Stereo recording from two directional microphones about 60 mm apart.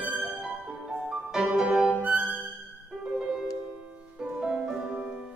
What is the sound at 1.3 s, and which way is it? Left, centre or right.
Music, centre.